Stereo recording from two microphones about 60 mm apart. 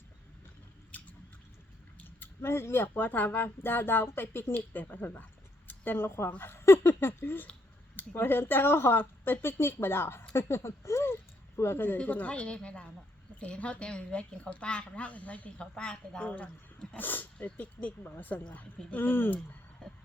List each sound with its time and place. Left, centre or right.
2.2 s speech: left
11.9 s speech: left
16.2 s speech: left